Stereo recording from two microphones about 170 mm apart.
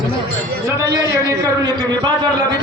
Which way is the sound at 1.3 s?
25° right (ahead or behind).